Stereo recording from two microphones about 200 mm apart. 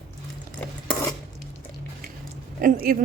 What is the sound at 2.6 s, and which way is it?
Speech, 45° right (ahead or behind).